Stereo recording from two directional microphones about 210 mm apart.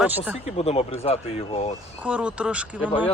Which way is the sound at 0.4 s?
30° left (ahead or behind).